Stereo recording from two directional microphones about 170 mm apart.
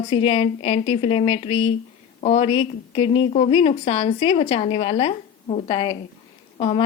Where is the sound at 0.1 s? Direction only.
35° left (ahead or behind).